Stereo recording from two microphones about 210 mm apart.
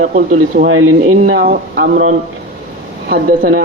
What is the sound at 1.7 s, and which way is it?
Speech, 45° right (ahead or behind).